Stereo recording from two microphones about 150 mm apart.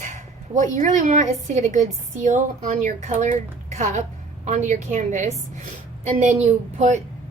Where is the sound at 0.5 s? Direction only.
60° right (ahead or behind).